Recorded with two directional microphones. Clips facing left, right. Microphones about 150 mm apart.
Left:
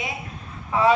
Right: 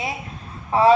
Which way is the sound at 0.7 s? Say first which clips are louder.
Right 4 dB; 35° right (ahead or behind).